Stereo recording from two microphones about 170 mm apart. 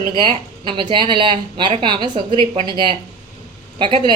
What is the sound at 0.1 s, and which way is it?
A woman's voice, 30° right (ahead or behind).